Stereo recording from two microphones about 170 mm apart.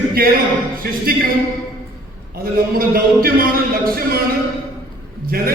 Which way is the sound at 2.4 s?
60° right (ahead or behind).